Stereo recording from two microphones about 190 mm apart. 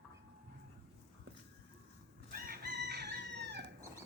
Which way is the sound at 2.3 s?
50° right (ahead or behind).